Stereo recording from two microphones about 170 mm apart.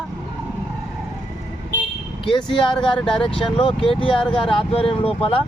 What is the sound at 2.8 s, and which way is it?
Speech, 5° left (ahead or behind).